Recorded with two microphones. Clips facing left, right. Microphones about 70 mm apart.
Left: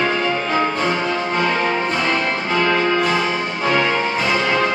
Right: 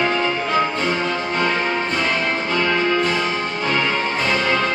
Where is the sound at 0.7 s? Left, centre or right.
Centre.